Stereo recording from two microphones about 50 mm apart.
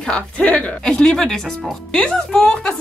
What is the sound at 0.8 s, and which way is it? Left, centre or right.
Speech, centre.